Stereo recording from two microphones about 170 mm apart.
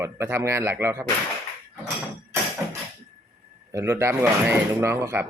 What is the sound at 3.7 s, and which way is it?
Speech, 15° right (ahead or behind).